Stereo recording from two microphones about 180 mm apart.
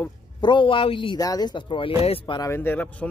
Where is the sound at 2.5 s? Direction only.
10° left (ahead or behind).